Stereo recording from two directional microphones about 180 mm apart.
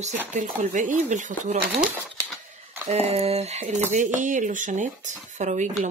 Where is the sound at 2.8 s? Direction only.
35° right (ahead or behind).